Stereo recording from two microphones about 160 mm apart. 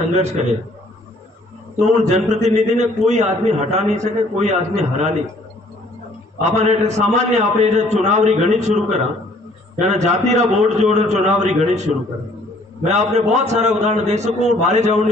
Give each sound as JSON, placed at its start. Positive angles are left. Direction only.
{"t": 1.8, "sound": "a man's voice", "side_deg": -45}
{"t": 6.4, "sound": "a man's voice", "side_deg": -45}